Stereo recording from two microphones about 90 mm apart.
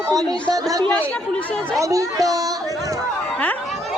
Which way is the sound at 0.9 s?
10° left (ahead or behind).